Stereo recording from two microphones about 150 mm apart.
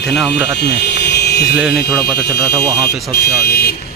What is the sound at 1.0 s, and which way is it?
Music, 90° left.